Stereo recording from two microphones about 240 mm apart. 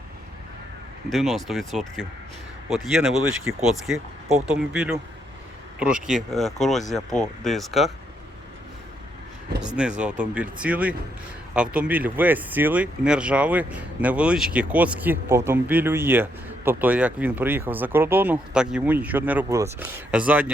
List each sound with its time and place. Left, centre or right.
1.1 s speech: centre
10.3 s speech: centre